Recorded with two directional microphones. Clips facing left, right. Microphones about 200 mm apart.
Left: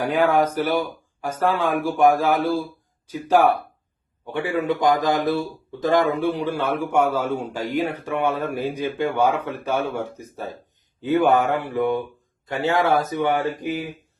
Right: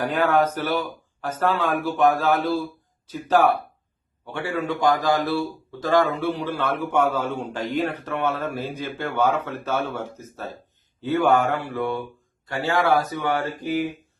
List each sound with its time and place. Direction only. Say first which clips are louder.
0.0 s speech: left 2 dB; 10° left (ahead or behind)